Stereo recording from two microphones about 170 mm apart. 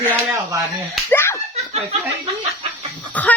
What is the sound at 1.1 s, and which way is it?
Slap, 15° left (ahead or behind).